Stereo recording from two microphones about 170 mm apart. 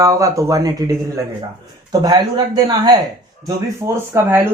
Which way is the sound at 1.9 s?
25° right (ahead or behind).